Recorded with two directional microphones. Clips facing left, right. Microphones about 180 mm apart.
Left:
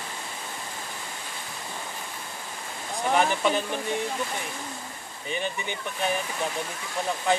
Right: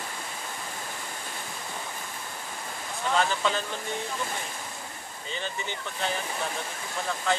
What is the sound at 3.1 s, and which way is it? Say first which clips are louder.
Speech: left 3 dB; 15° left (ahead or behind).